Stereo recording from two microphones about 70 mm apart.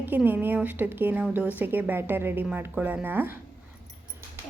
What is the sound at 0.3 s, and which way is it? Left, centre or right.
A woman's voice, right.